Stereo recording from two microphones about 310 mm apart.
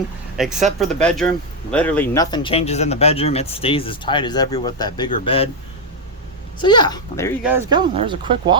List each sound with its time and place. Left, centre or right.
0.3 s speech: centre
6.6 s speech: centre
7.4 s speech: centre